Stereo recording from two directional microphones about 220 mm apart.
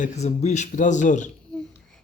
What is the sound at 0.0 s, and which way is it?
Speech, 35° left (ahead or behind).